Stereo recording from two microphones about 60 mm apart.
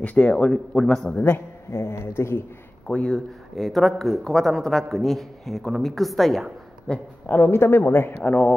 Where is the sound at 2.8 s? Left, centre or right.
Centre.